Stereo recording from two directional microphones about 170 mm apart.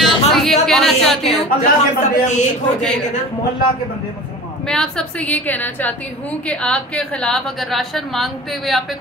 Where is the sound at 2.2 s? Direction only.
45° left (ahead or behind).